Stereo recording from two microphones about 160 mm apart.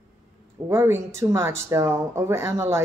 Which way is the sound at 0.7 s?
15° right (ahead or behind).